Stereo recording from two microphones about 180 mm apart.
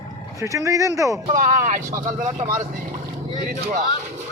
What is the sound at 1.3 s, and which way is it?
Speech, 50° right (ahead or behind).